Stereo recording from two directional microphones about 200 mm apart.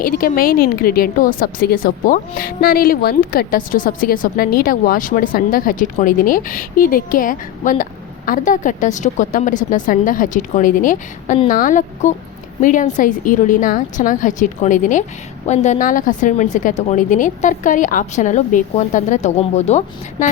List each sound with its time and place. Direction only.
0.0 s a woman's voice: 45° left (ahead or behind)